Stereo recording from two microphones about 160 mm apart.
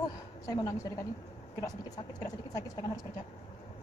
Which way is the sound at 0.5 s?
25° left (ahead or behind).